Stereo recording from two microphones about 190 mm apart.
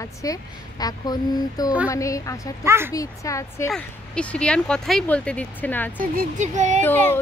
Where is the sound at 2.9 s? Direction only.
15° left (ahead or behind).